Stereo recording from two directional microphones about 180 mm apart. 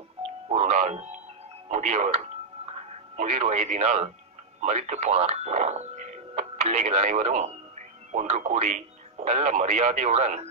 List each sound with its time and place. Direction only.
0.5 s music: 40° right (ahead or behind)
1.7 s speech: 40° right (ahead or behind)